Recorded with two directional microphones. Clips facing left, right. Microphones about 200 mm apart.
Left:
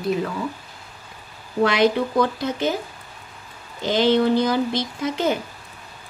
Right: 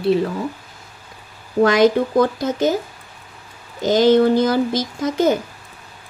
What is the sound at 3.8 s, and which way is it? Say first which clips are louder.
Speech: right 5 dB; 40° right (ahead or behind).